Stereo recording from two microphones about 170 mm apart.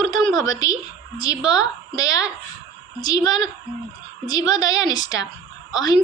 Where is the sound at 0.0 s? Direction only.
25° left (ahead or behind).